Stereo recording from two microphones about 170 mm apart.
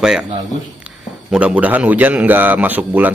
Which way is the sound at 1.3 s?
10° right (ahead or behind).